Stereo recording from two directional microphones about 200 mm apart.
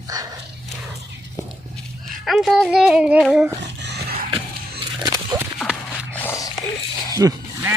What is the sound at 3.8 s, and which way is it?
Dog, 60° right (ahead or behind).